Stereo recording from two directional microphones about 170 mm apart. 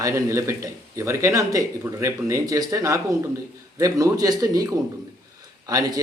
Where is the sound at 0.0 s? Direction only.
15° right (ahead or behind).